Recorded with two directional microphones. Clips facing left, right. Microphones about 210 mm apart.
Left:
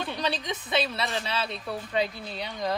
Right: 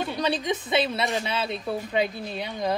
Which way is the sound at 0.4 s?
20° right (ahead or behind).